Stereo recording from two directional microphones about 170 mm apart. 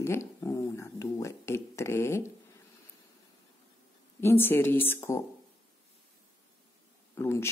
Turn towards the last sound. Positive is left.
turn(degrees=15)  # may be behind; listen again after turning